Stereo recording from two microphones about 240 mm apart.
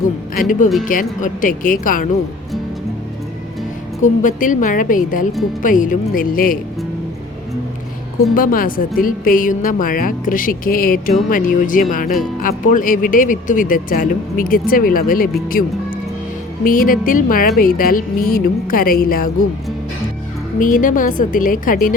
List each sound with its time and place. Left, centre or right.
0.3 s speech: left
4.0 s speech: left
8.4 s speech: left
16.6 s speech: left
20.6 s speech: left